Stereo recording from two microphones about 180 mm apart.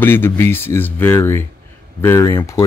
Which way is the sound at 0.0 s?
10° left (ahead or behind).